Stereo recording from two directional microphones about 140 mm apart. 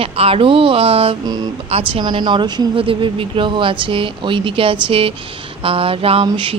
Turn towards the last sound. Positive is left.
turn(degrees=-35)  # may be behind; listen again after turning